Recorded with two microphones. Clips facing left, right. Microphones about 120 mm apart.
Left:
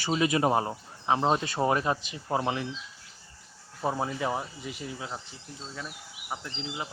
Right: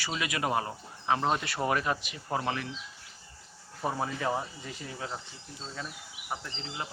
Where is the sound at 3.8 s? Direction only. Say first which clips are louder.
Left 2 dB; 15° left (ahead or behind).